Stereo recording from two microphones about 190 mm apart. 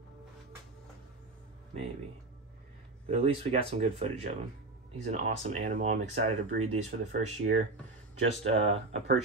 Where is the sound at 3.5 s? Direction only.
35° right (ahead or behind).